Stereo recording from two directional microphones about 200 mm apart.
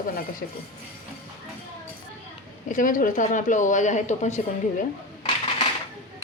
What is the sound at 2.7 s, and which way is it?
Speech, 40° left (ahead or behind).